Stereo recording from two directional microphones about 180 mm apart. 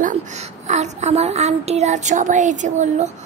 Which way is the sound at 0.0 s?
40° right (ahead or behind).